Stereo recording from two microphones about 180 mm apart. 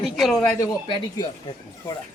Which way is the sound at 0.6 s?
25° left (ahead or behind).